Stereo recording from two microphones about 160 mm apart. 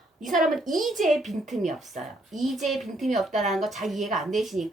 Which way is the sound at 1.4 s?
45° right (ahead or behind).